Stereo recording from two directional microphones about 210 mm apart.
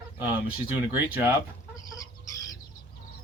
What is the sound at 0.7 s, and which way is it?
Speech, 10° right (ahead or behind).